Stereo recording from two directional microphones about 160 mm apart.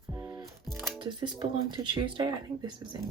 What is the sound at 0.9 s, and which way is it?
Speech, 30° right (ahead or behind).